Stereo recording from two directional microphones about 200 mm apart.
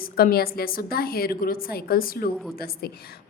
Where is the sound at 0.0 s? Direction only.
50° left (ahead or behind).